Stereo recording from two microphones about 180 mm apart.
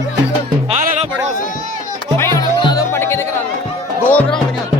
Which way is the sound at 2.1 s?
15° left (ahead or behind).